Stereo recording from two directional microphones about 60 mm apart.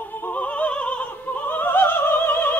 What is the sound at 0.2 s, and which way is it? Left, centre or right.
Opera, left.